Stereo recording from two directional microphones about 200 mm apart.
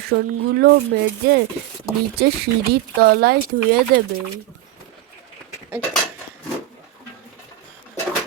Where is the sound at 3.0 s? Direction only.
50° right (ahead or behind).